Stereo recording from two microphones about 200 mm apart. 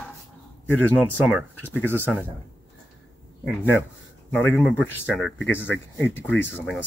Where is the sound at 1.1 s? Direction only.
10° right (ahead or behind).